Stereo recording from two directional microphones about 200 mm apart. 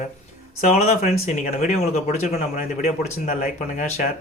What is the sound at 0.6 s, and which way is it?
Speech, 35° left (ahead or behind).